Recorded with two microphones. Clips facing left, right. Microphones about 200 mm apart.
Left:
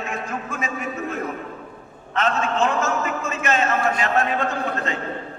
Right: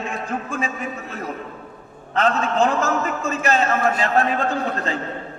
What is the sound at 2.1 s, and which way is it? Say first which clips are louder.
A man's voice: right 3 dB; 35° right (ahead or behind).